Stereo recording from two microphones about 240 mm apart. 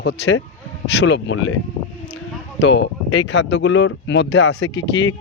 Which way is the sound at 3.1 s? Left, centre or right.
Left.